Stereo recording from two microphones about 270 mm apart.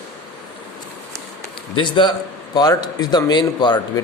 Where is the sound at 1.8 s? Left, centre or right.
Centre.